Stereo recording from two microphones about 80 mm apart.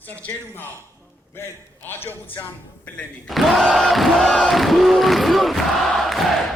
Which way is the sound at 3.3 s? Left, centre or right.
Centre.